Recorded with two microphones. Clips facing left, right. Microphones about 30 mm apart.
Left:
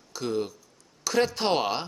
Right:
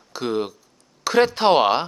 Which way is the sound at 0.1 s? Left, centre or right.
Right.